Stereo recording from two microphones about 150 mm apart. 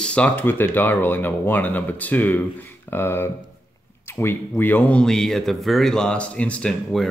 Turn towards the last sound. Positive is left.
turn(degrees=5)  # may be behind; listen again after turning